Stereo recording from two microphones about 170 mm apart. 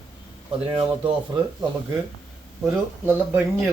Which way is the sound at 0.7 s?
30° right (ahead or behind).